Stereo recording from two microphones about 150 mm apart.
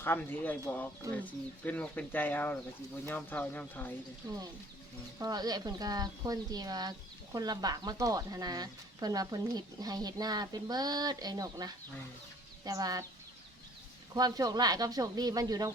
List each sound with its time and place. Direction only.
0.0 s speech: 15° left (ahead or behind)
5.2 s speech: 25° right (ahead or behind)
14.1 s speech: 25° right (ahead or behind)